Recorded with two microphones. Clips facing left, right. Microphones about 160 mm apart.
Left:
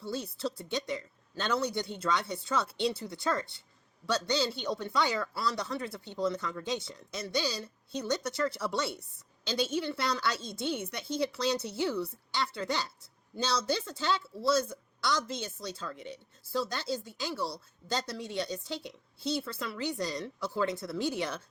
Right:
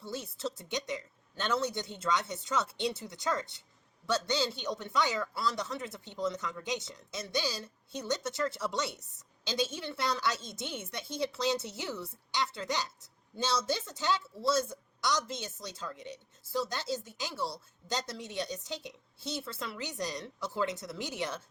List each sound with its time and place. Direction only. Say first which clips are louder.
0.0 s a woman's voice: left 3 dB; 20° right (ahead or behind)